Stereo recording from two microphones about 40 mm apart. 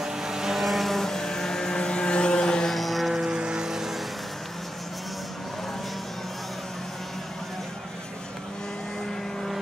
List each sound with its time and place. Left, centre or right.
0.0 s vehicle: centre
0.6 s vehicle: centre
2.7 s music: centre
3.3 s vehicle: right